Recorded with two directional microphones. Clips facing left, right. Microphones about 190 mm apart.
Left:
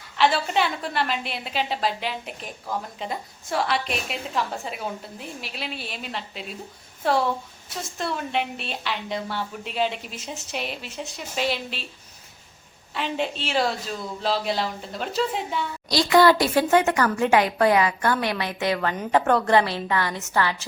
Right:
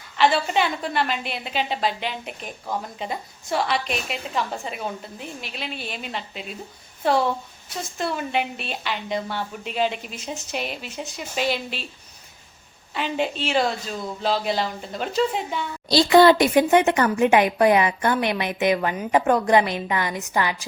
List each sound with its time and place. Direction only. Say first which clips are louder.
0.2 s a woman's voice: right 1 dB; centre (ahead or behind)
12.9 s a woman's voice: right 2 dB; centre (ahead or behind)
15.9 s speech: right 3 dB; 30° right (ahead or behind)